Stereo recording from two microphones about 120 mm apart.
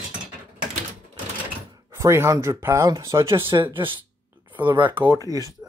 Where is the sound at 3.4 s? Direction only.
40° right (ahead or behind).